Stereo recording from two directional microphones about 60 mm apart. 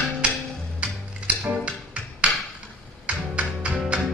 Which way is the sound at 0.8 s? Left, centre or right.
Centre.